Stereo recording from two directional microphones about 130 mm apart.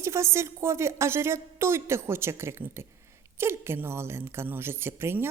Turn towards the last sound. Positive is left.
turn(degrees=-20)  # may be behind; listen again after turning